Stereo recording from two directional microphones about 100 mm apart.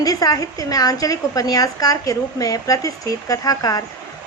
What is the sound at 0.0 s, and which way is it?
A woman's voice, 35° left (ahead or behind).